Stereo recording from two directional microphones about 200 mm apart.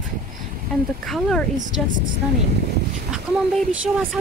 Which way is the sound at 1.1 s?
Centre (ahead or behind).